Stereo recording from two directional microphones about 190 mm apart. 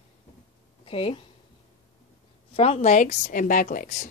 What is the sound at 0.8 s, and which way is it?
Speech, 30° left (ahead or behind).